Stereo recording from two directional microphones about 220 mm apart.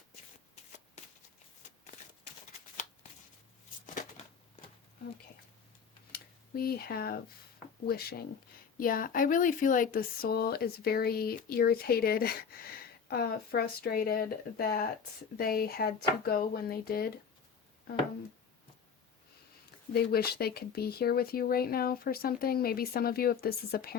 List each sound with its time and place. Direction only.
6.1 s a sound: 45° left (ahead or behind)
7.9 s speech: 45° left (ahead or behind)
19.9 s speech: 45° left (ahead or behind)